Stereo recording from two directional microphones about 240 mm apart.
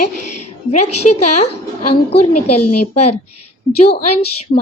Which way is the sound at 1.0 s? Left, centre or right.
Left.